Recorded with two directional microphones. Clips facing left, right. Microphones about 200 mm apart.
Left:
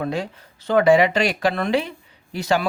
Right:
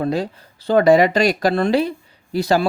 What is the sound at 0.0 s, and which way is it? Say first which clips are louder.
Speech: right 4 dB; 35° right (ahead or behind).